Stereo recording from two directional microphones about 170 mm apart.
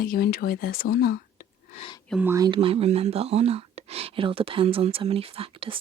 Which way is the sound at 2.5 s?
35° right (ahead or behind).